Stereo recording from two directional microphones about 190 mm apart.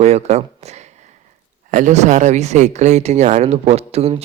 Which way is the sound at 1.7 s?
40° right (ahead or behind).